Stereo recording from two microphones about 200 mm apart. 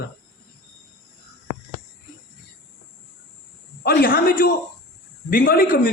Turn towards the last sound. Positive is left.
turn(degrees=45)  # may be behind; listen again after turning